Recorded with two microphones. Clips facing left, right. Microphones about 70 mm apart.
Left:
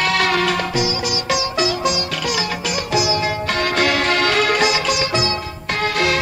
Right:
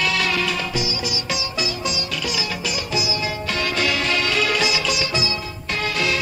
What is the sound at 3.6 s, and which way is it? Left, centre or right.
Music, left.